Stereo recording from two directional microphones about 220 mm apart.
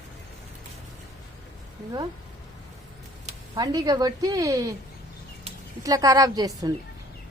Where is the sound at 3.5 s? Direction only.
15° right (ahead or behind).